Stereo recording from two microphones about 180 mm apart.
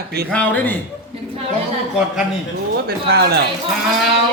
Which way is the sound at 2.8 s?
60° right (ahead or behind).